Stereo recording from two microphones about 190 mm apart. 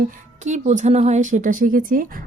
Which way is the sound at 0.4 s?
40° right (ahead or behind).